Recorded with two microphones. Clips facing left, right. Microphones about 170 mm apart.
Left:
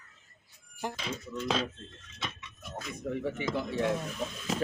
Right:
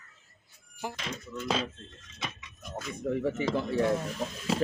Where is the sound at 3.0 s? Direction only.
30° right (ahead or behind).